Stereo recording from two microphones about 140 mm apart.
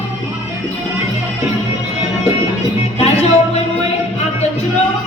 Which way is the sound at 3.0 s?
50° left (ahead or behind).